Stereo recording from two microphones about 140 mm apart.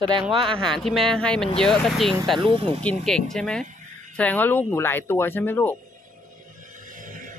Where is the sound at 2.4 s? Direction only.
40° right (ahead or behind).